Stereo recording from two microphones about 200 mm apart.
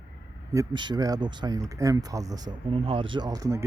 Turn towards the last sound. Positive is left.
turn(degrees=-15)  # may be behind; listen again after turning